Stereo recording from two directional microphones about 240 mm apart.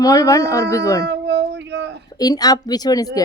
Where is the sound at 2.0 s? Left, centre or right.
Centre.